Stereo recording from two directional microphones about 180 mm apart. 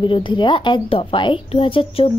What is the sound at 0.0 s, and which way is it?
A woman's voice, 25° left (ahead or behind).